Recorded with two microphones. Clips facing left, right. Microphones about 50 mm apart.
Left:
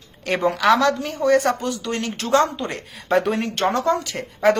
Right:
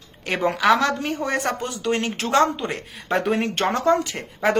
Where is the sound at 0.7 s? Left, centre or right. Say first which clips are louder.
Left 2 dB; right.